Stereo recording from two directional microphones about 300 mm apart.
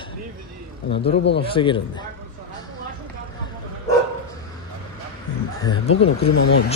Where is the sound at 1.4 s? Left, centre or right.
Centre.